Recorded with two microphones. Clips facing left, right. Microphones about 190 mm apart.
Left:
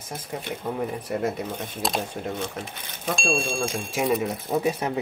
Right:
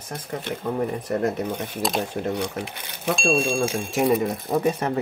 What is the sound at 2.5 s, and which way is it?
Speech, 65° right (ahead or behind).